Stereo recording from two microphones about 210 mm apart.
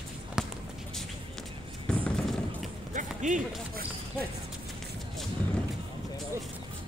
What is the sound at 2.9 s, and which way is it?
Run, 35° right (ahead or behind).